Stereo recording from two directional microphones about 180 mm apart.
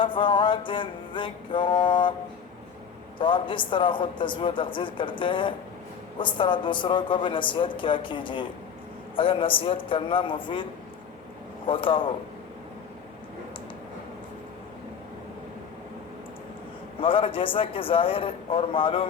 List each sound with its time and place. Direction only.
0.0 s speech: 30° left (ahead or behind)
3.2 s speech: 25° left (ahead or behind)
17.0 s speech: 30° left (ahead or behind)